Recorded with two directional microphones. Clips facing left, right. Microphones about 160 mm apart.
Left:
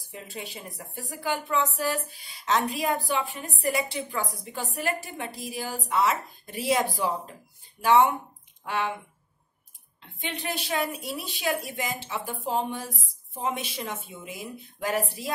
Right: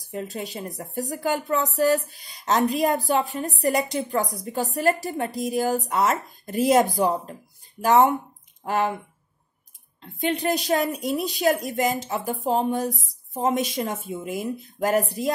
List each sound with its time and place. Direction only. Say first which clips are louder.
0.1 s a woman's voice: right 8 dB; 40° right (ahead or behind)
10.2 s a woman's voice: right 10 dB; 40° right (ahead or behind)